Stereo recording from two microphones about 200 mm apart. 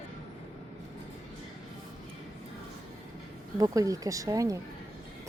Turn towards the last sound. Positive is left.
turn(degrees=-15)  # may be behind; listen again after turning